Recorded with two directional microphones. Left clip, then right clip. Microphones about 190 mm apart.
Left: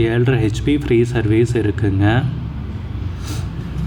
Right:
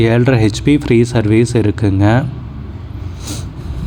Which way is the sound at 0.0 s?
35° right (ahead or behind).